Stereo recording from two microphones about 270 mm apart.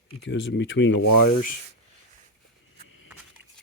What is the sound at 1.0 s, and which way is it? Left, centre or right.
Speech, left.